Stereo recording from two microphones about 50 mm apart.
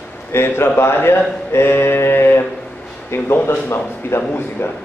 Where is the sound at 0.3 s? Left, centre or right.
Left.